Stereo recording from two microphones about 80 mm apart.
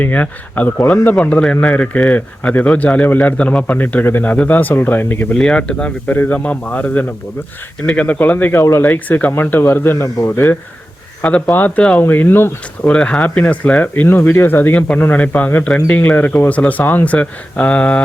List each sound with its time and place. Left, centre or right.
0.0 s a man's voice: centre
5.3 s a man's voice: centre
12.0 s a man's voice: left
12.9 s a man's voice: centre